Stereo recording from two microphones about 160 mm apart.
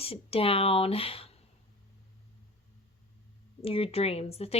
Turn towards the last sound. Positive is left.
turn(degrees=40)  # may be behind; listen again after turning